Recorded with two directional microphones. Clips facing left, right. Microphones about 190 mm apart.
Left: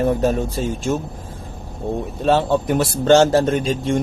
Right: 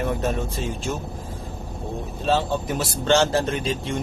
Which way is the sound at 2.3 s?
60° left (ahead or behind).